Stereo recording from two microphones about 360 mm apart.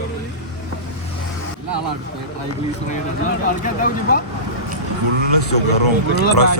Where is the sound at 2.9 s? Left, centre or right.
Left.